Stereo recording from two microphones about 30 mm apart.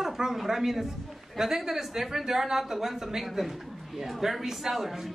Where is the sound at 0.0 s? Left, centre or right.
Centre.